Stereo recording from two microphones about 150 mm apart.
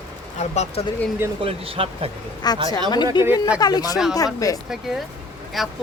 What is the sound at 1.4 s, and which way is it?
Speech, 40° right (ahead or behind).